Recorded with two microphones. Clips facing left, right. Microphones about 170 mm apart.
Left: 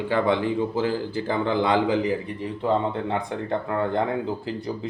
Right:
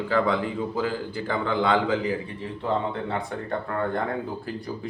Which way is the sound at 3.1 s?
15° left (ahead or behind).